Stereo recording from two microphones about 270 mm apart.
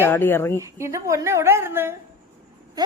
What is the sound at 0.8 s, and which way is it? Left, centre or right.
A woman's voice, centre.